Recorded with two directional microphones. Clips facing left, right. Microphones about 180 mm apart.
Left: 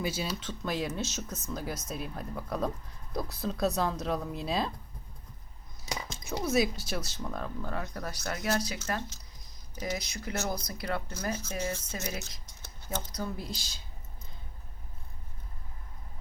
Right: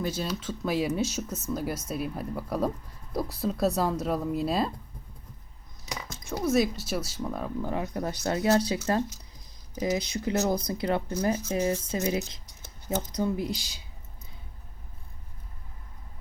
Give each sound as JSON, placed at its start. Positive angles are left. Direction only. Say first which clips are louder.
{"t": 0.0, "sound": "speech", "louder": "right 3 dB", "side_deg": 5}
{"t": 6.2, "sound": "speech", "louder": "right 3 dB", "side_deg": 0}